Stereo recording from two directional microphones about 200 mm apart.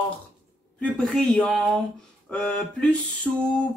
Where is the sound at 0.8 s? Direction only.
5° left (ahead or behind).